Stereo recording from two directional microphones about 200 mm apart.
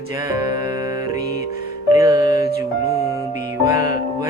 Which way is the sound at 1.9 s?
15° right (ahead or behind).